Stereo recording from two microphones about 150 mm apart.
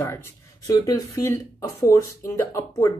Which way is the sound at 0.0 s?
15° left (ahead or behind).